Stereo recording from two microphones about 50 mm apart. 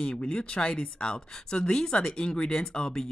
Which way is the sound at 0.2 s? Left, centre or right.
Left.